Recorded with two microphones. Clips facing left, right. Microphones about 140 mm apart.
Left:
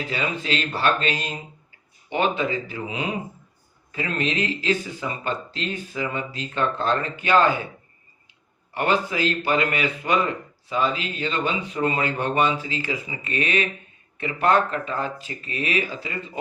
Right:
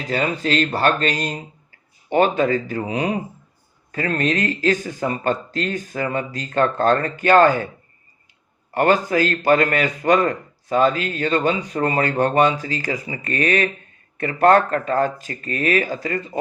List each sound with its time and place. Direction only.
0.1 s speech: 40° right (ahead or behind)
8.7 s speech: 45° right (ahead or behind)